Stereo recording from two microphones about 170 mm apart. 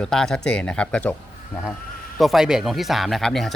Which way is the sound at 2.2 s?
Centre (ahead or behind).